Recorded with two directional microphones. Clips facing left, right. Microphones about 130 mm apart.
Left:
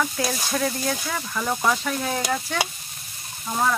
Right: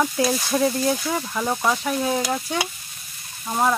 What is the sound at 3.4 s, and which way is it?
Speech, 20° right (ahead or behind).